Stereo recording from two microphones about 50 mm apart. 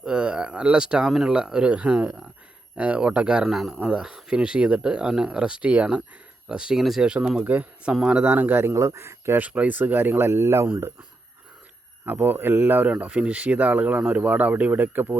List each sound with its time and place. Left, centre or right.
0.0 s speech: centre
3.5 s speech: centre
3.8 s speech: centre
6.7 s speech: centre
7.0 s speech: centre
7.4 s a man's voice: right
8.7 s speech: right
9.5 s speech: right
12.0 s speech: right
12.8 s speech: right